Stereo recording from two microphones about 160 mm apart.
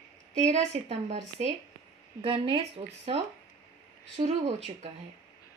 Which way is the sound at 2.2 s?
35° right (ahead or behind).